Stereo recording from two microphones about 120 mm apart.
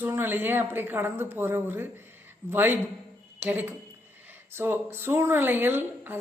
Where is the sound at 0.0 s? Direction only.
20° right (ahead or behind).